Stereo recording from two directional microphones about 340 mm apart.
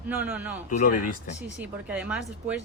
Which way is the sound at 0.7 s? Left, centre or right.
Left.